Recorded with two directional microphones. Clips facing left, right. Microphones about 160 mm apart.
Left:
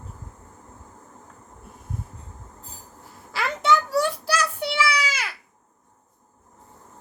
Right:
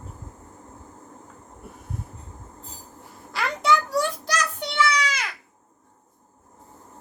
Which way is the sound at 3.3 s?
Centre (ahead or behind).